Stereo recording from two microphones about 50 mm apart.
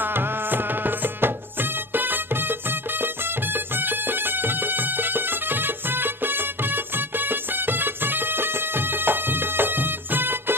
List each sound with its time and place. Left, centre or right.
0.0 s music: right
3.8 s music: right